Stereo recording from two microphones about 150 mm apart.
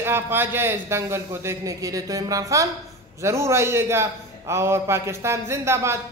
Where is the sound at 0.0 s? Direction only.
15° right (ahead or behind).